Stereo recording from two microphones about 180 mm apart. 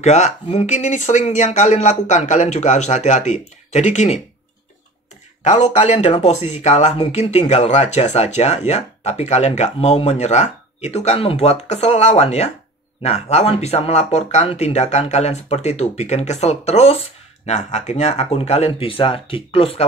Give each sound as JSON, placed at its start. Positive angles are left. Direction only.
{"t": 0.0, "sound": "speech", "side_deg": 40}
{"t": 5.4, "sound": "speech", "side_deg": 40}